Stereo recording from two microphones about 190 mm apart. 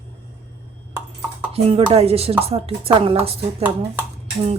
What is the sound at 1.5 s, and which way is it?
A woman's voice, 30° right (ahead or behind).